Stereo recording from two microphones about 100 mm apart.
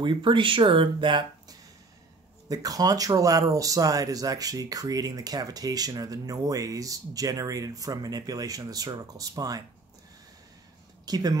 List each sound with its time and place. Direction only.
0.0 s speech: 55° right (ahead or behind)
2.4 s speech: 40° right (ahead or behind)
11.1 s speech: 40° right (ahead or behind)